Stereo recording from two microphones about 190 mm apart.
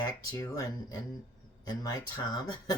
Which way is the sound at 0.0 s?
15° left (ahead or behind).